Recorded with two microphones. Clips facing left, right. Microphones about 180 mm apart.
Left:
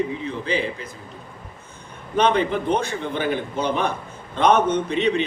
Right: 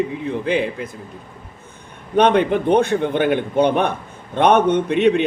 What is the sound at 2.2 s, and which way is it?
Speech, 60° right (ahead or behind).